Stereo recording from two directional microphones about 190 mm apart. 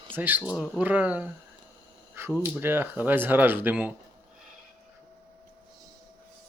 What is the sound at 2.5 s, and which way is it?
Speech, 10° right (ahead or behind).